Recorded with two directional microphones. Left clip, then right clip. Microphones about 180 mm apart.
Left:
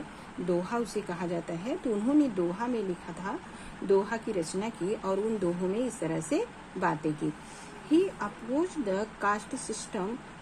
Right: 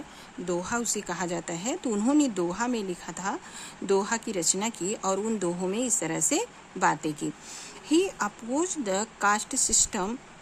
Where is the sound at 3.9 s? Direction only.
45° right (ahead or behind).